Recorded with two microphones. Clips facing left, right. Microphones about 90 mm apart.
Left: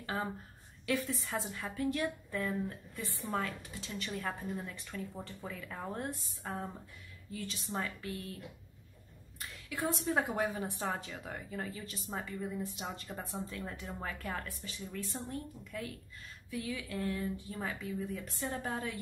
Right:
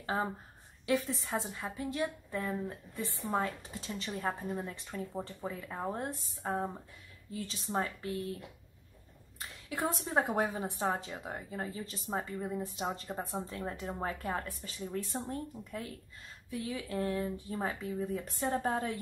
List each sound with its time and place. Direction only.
0.0 s a woman's voice: 25° right (ahead or behind)
9.7 s speech: 35° right (ahead or behind)